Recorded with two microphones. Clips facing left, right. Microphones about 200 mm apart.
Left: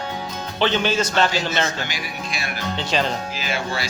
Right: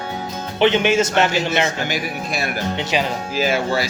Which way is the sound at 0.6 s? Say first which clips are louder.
Right 5 dB; 20° right (ahead or behind).